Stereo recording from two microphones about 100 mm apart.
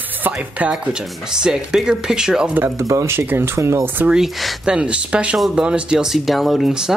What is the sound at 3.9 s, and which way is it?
Speech, 10° right (ahead or behind).